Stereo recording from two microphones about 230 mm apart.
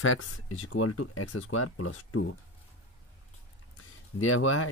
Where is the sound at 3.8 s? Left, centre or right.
Left.